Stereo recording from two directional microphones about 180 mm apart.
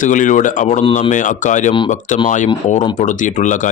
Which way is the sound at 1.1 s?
45° left (ahead or behind).